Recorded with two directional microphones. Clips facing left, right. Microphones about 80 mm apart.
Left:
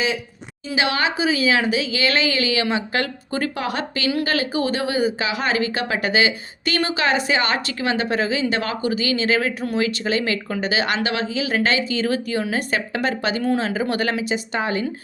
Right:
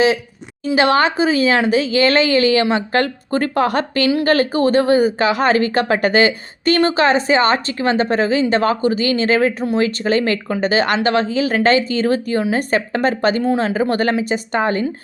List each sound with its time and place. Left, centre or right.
0.8 s a woman's voice: right